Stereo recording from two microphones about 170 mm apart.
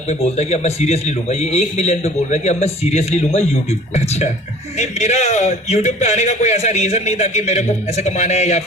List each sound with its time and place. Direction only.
0.1 s speech: 40° left (ahead or behind)